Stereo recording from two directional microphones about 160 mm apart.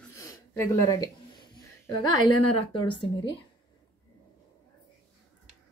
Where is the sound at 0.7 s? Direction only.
20° left (ahead or behind).